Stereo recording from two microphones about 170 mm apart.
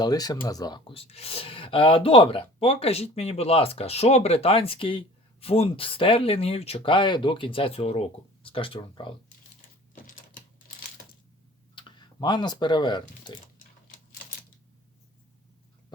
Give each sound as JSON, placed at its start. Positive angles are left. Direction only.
{"t": 0.0, "sound": "speech", "side_deg": 20}
{"t": 9.6, "sound": "typing", "side_deg": 50}
{"t": 11.7, "sound": "speech", "side_deg": 30}